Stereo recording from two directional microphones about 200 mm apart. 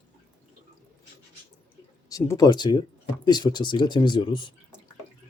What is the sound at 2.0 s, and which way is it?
Speech, 15° left (ahead or behind).